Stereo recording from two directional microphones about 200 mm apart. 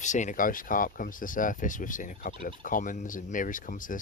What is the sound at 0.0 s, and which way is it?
Speech, 35° left (ahead or behind).